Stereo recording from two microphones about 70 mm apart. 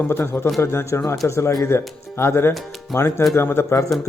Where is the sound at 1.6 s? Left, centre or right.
Left.